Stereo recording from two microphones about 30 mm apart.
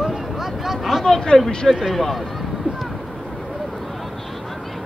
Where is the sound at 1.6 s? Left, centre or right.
Centre.